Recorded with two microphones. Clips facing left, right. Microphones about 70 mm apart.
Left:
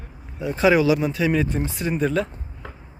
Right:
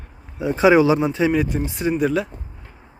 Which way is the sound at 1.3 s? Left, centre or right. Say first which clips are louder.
Right 2 dB; centre.